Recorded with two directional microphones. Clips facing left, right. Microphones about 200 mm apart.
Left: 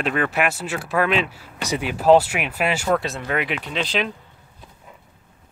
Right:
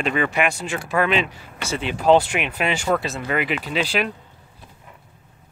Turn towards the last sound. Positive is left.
turn(degrees=-5)  # may be behind; listen again after turning